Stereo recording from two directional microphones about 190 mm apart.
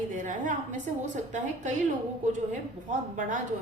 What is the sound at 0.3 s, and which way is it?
A woman's voice, 40° right (ahead or behind).